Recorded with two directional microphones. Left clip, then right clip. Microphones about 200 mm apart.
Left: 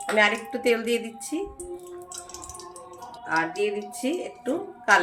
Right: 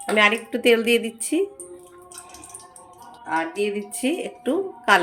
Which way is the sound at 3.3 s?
40° right (ahead or behind).